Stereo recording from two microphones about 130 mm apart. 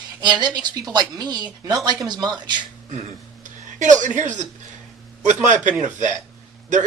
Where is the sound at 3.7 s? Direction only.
75° right (ahead or behind).